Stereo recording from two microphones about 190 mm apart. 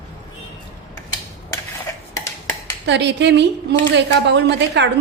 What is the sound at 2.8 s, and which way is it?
A woman's voice, 65° right (ahead or behind).